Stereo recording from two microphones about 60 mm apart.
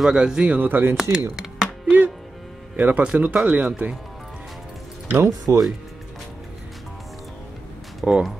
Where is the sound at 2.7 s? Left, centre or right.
Right.